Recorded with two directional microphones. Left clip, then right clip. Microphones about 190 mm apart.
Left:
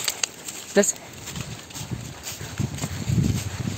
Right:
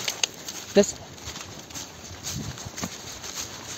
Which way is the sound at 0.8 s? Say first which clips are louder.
Even; 20° right (ahead or behind).